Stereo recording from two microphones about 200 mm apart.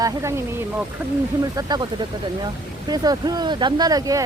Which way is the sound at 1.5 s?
20° right (ahead or behind).